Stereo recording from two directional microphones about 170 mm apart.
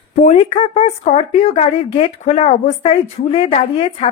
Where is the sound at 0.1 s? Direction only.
45° left (ahead or behind).